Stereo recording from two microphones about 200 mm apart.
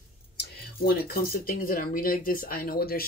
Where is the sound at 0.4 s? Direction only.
50° left (ahead or behind).